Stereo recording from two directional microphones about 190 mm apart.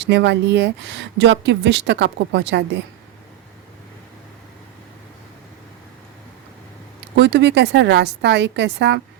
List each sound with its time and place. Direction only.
0.0 s speech: 65° right (ahead or behind)
7.2 s a woman's voice: 65° right (ahead or behind)